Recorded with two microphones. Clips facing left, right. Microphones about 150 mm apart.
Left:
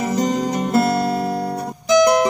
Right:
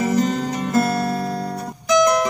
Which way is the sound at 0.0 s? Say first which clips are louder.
Even; 15° left (ahead or behind).